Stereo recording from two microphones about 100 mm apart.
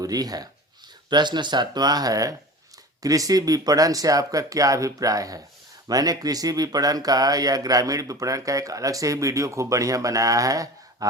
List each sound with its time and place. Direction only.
0.0 s speech: 40° right (ahead or behind)